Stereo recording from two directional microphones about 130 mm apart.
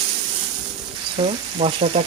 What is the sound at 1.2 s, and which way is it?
Speech, 55° right (ahead or behind).